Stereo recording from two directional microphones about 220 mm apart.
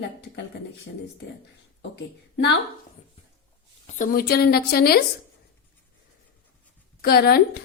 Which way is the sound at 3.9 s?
40° left (ahead or behind).